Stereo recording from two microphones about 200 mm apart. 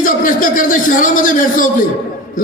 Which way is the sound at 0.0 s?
40° left (ahead or behind).